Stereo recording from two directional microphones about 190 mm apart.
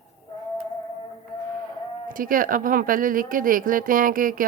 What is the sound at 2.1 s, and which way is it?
Speech, 45° right (ahead or behind).